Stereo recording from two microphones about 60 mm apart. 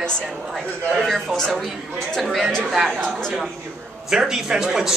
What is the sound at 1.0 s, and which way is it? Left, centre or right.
Speech, centre.